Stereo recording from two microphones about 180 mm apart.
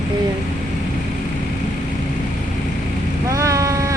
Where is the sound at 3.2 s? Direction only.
15° right (ahead or behind).